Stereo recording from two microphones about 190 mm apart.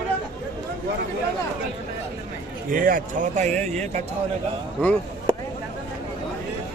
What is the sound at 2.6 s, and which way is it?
Speech, 45° right (ahead or behind).